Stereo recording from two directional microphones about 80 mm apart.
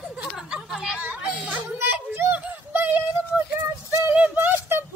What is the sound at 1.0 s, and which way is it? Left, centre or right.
Children playing, centre.